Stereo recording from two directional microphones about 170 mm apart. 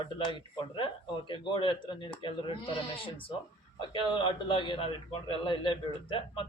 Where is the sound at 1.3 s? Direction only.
30° left (ahead or behind).